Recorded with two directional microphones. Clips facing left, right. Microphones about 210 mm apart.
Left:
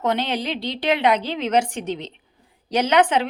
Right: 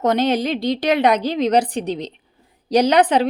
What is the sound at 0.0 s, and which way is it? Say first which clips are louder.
Speech: right 6 dB; 40° right (ahead or behind).